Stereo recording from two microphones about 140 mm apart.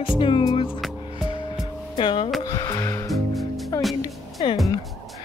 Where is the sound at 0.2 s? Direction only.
35° left (ahead or behind).